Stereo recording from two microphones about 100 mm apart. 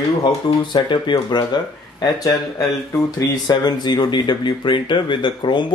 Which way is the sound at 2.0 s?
40° left (ahead or behind).